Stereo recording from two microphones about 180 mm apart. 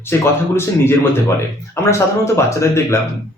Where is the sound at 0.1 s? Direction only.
15° left (ahead or behind).